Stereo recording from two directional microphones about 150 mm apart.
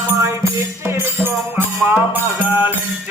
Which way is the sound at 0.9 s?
15° right (ahead or behind).